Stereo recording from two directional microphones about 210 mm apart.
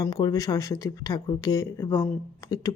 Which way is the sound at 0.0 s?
20° left (ahead or behind).